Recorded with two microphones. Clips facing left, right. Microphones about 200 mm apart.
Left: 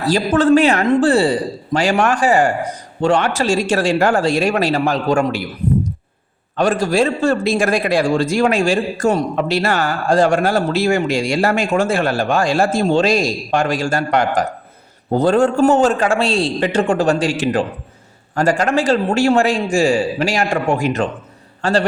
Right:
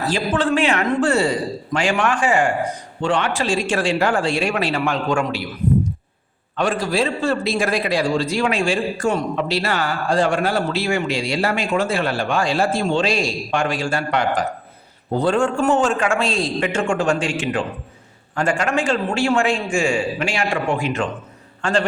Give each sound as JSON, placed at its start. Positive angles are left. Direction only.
{"t": 0.0, "sound": "a man's voice", "side_deg": 40}
{"t": 6.6, "sound": "a man's voice", "side_deg": 45}